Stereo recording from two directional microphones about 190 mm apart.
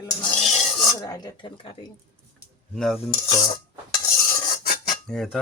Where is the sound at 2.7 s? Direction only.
Centre (ahead or behind).